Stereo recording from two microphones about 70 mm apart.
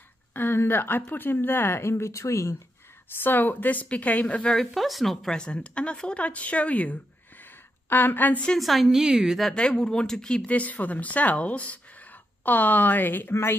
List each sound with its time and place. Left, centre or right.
0.3 s speech: left
3.2 s speech: left; by 4.6 s centre
4.7 s a woman's voice: centre; by 8.5 s left
8.5 s a woman's voice: centre
9.4 s speech: centre; by 13.3 s left
13.3 s speech: left